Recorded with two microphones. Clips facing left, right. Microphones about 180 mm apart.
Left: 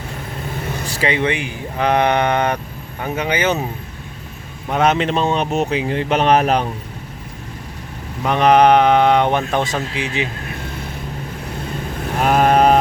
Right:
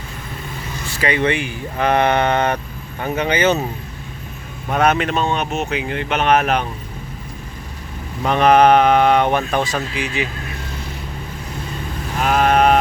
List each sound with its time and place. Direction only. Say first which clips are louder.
0.9 s vehicle: even; 35° left (ahead or behind)
1.1 s speech: right 1 dB; 15° left (ahead or behind)
4.7 s speech: left 1 dB; 20° left (ahead or behind)
8.2 s speech: even; 15° left (ahead or behind)
12.2 s a sound: left 2 dB; 35° left (ahead or behind)